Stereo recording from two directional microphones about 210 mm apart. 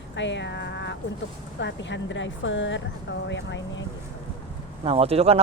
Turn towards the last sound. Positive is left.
turn(degrees=-30)  # may be behind; listen again after turning